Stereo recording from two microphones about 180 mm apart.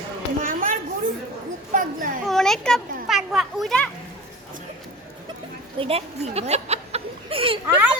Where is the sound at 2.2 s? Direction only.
Centre (ahead or behind).